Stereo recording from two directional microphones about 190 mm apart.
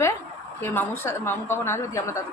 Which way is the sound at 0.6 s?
10° left (ahead or behind).